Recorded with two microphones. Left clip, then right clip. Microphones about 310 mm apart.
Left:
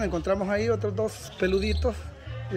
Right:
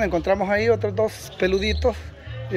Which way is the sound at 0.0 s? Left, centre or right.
Centre.